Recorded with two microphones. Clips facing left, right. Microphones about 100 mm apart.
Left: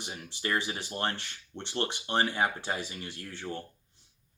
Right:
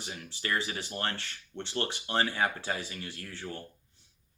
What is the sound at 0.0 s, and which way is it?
Speech, 20° left (ahead or behind).